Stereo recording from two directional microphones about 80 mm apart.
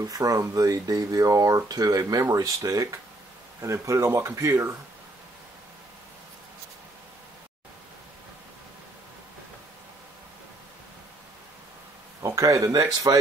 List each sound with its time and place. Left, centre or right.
0.0 s speech: right
12.2 s speech: right